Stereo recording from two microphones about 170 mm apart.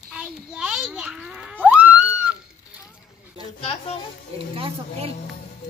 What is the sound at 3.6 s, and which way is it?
Speech, 35° left (ahead or behind).